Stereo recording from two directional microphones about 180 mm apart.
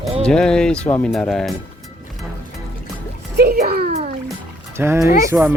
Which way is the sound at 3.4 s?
60° right (ahead or behind).